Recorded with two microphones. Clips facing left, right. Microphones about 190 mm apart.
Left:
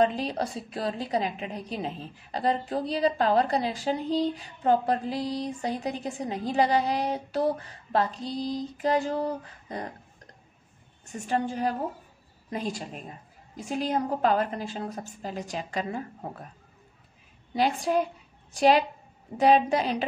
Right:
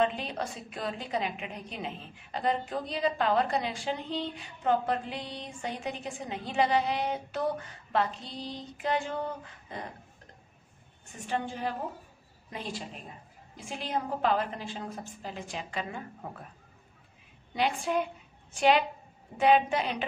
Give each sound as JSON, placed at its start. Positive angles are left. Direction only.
{"t": 0.0, "sound": "a woman's voice", "side_deg": 35}
{"t": 11.1, "sound": "a woman's voice", "side_deg": 40}
{"t": 17.6, "sound": "a woman's voice", "side_deg": 40}